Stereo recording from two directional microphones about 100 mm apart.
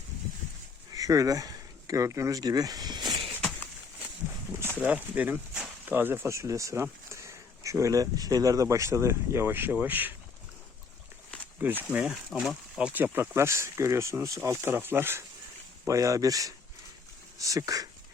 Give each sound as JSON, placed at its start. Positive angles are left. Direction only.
{"t": 0.9, "sound": "speech", "side_deg": -35}
{"t": 4.8, "sound": "speech", "side_deg": -15}
{"t": 11.6, "sound": "speech", "side_deg": -20}
{"t": 11.9, "sound": "speech", "side_deg": -5}
{"t": 12.9, "sound": "speech", "side_deg": -20}
{"t": 15.9, "sound": "speech", "side_deg": -35}